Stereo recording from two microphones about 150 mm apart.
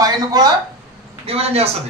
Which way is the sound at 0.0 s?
25° right (ahead or behind).